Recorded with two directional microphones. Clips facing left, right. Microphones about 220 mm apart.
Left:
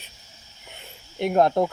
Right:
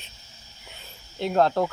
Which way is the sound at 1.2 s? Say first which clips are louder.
Left 2 dB; 15° left (ahead or behind).